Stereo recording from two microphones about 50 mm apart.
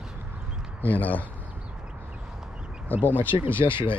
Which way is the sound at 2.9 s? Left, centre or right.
Left.